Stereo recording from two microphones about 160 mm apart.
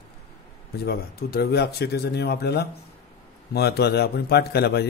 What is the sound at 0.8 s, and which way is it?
A man's voice, 75° left (ahead or behind).